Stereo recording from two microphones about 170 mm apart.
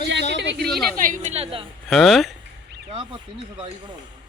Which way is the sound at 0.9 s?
50° right (ahead or behind).